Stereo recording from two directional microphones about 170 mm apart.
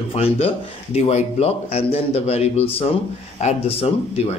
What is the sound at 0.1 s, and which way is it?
Speech, 35° left (ahead or behind).